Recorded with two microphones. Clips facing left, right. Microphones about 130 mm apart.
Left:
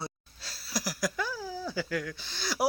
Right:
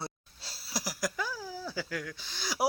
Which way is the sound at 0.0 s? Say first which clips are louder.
Left 1 dB; 25° right (ahead or behind).